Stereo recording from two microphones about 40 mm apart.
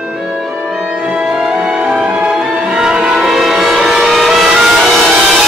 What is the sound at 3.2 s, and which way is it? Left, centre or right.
Vehicle, centre.